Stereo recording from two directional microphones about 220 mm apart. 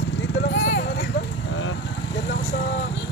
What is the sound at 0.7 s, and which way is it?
Clip-clop, 50° left (ahead or behind).